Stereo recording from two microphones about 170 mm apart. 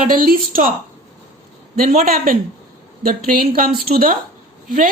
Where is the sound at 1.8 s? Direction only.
55° right (ahead or behind).